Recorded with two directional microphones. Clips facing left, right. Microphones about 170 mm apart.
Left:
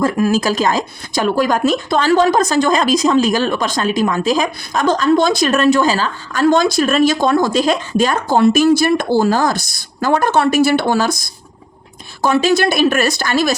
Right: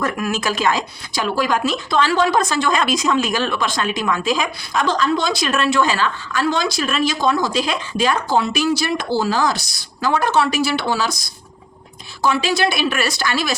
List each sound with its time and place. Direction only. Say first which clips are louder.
0.0 s speech: left 7 dB; 35° left (ahead or behind)